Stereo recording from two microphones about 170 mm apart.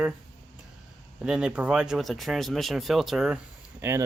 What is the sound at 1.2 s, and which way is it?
Speech, 5° right (ahead or behind).